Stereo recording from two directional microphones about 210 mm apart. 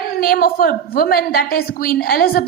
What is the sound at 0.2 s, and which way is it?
A woman's voice, 45° left (ahead or behind).